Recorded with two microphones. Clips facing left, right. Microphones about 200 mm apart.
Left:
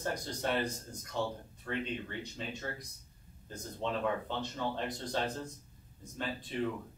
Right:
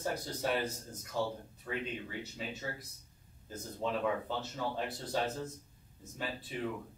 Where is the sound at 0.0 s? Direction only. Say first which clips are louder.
Even; 5° right (ahead or behind).